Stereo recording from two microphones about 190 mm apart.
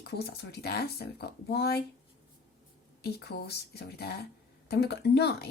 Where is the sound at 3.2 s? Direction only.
60° left (ahead or behind).